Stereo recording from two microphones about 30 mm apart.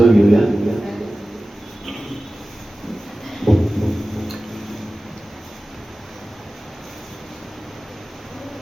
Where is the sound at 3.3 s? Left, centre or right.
Centre.